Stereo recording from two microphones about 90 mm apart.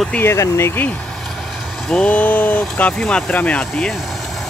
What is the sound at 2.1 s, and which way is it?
Speech, 20° left (ahead or behind).